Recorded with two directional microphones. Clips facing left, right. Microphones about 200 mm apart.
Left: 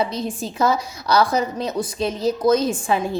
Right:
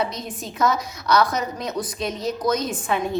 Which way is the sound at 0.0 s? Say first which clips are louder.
Left 4 dB; 30° left (ahead or behind).